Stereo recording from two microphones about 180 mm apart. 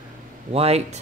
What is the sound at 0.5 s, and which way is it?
Speech, 35° right (ahead or behind).